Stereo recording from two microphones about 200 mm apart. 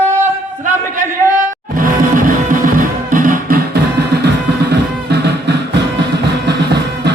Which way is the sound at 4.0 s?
55° right (ahead or behind).